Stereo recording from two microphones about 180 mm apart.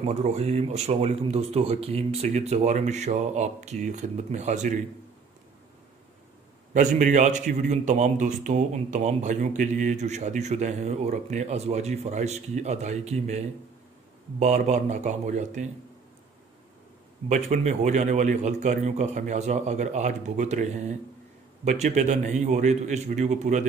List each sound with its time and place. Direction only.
0.0 s a man's voice: 40° right (ahead or behind)
6.7 s a man's voice: 45° right (ahead or behind)
17.3 s a man's voice: 45° right (ahead or behind)